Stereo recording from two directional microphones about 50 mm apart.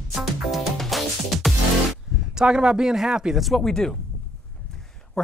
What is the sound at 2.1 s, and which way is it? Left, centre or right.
Speech, centre.